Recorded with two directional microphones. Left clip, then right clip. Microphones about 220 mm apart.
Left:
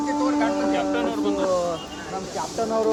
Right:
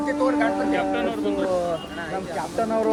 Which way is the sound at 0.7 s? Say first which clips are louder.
Even; 30° left (ahead or behind).